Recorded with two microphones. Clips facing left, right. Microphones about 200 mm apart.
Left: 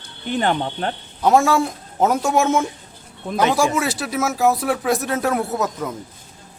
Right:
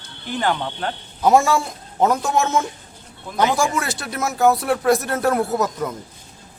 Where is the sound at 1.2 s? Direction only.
Centre (ahead or behind).